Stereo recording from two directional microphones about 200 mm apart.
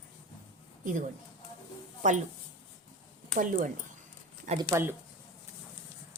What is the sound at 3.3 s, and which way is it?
Speech, 40° right (ahead or behind).